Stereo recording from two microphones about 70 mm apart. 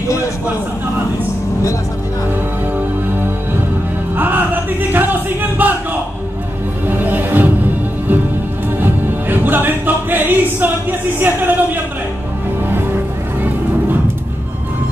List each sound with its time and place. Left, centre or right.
4.9 s music: right
6.9 s music: right
8.7 s music: right